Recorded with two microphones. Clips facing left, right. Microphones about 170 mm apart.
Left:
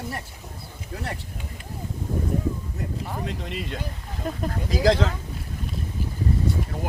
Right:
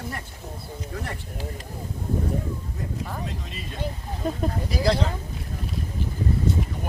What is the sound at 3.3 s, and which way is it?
Speech, 70° left (ahead or behind).